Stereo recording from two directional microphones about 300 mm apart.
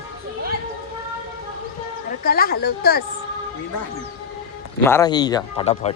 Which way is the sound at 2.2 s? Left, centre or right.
Left.